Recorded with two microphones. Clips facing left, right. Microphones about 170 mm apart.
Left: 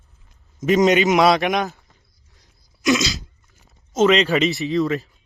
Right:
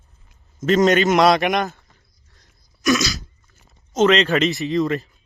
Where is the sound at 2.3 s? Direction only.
15° left (ahead or behind).